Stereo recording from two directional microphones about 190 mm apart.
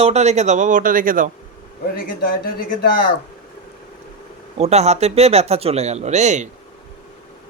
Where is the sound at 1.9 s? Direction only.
50° left (ahead or behind).